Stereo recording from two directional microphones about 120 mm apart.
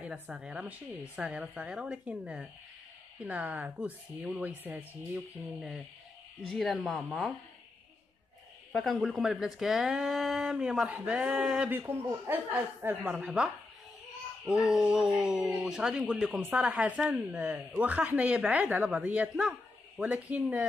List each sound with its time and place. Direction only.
0.0 s speech: 10° right (ahead or behind)
6.4 s speech: centre (ahead or behind)
8.7 s speech: centre (ahead or behind)
11.8 s speech: 20° right (ahead or behind)